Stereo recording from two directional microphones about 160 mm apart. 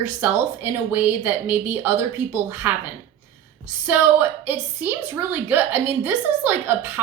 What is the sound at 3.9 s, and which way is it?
A woman's voice, 15° right (ahead or behind).